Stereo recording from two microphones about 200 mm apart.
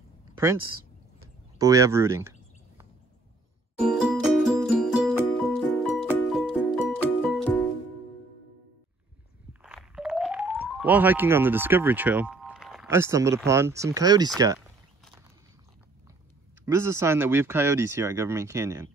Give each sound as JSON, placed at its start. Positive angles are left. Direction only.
{"t": 1.6, "sound": "speech", "side_deg": -15}
{"t": 3.8, "sound": "music", "side_deg": 0}
{"t": 9.5, "sound": "music", "side_deg": -5}
{"t": 12.9, "sound": "speech", "side_deg": -15}
{"t": 16.6, "sound": "speech", "side_deg": -15}